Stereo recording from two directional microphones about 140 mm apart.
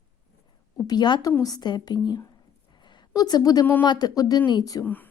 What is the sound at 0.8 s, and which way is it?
A woman's voice, 30° left (ahead or behind).